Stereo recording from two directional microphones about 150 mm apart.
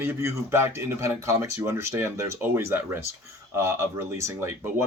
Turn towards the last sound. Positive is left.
turn(degrees=-20)  # may be behind; listen again after turning